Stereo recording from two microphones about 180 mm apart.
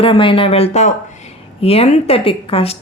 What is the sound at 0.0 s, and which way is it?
Speech, 30° left (ahead or behind).